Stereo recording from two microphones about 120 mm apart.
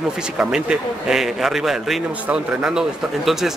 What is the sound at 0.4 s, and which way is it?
A man's voice, 5° right (ahead or behind).